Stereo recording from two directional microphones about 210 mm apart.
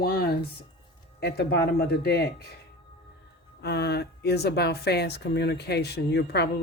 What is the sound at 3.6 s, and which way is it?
A man's voice, 50° left (ahead or behind).